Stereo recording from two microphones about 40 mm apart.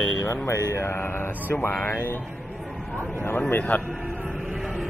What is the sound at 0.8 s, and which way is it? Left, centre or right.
Speech, left.